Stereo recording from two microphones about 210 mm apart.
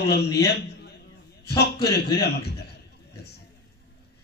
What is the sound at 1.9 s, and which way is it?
Speech, 50° left (ahead or behind).